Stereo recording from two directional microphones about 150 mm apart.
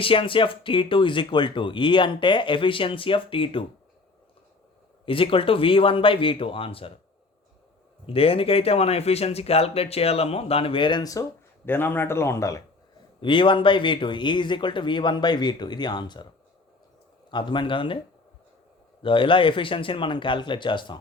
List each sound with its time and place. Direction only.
0.0 s speech: 35° left (ahead or behind)
5.0 s speech: 35° left (ahead or behind)
8.0 s speech: 40° left (ahead or behind); by 12.6 s 20° left (ahead or behind)
13.1 s speech: 35° left (ahead or behind)
17.3 s speech: 30° left (ahead or behind)
19.0 s speech: 35° left (ahead or behind)